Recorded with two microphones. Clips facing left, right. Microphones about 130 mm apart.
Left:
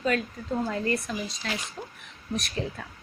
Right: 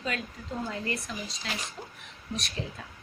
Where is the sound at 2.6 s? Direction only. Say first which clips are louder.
Left 6 dB; 60° left (ahead or behind).